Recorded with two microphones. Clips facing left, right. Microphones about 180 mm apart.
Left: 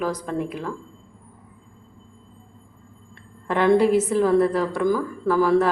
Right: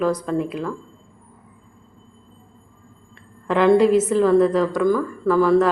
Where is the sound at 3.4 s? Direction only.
10° left (ahead or behind).